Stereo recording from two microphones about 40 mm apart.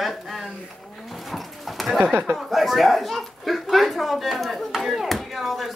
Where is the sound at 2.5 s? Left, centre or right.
Centre.